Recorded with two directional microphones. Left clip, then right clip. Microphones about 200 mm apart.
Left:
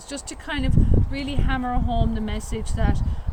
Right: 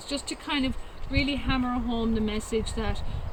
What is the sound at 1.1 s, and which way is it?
Speech, 55° left (ahead or behind).